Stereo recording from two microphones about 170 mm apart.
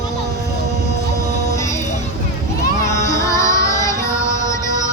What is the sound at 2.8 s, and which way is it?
Music, 20° left (ahead or behind).